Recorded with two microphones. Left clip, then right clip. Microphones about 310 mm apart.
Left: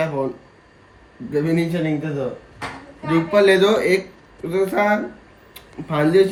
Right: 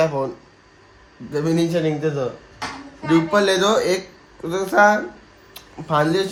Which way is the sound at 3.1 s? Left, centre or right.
Centre.